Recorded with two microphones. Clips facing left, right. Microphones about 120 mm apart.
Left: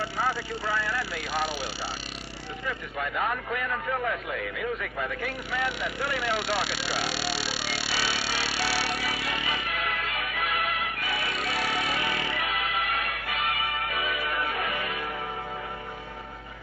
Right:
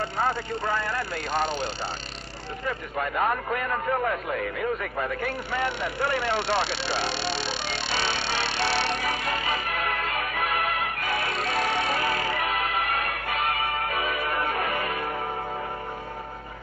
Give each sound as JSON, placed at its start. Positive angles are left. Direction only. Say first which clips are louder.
{"t": 0.6, "sound": "a man's voice", "louder": "right 1 dB", "side_deg": -50}
{"t": 1.5, "sound": "speech", "louder": "right 4 dB", "side_deg": 10}
{"t": 2.6, "sound": "a man's voice", "louder": "right 4 dB", "side_deg": -45}
{"t": 6.4, "sound": "speech", "louder": "right 3 dB", "side_deg": 10}
{"t": 8.2, "sound": "vehicle", "louder": "right 3 dB", "side_deg": 10}
{"t": 9.0, "sound": "music", "louder": "right 3 dB", "side_deg": -45}